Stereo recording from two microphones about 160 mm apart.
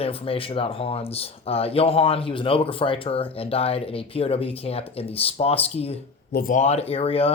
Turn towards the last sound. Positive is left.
turn(degrees=35)  # may be behind; listen again after turning